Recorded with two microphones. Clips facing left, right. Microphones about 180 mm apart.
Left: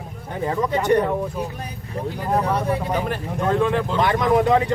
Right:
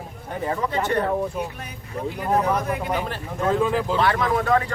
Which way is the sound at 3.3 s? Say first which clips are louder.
Left 1 dB; centre (ahead or behind).